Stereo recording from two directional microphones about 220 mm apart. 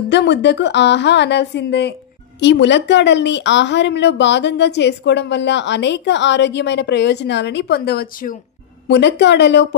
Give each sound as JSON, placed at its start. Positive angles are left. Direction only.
{"t": 0.1, "sound": "a woman's voice", "side_deg": 50}
{"t": 8.8, "sound": "a woman's voice", "side_deg": 50}